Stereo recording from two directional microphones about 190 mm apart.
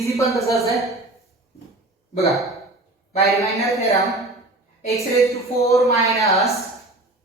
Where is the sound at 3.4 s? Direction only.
15° left (ahead or behind).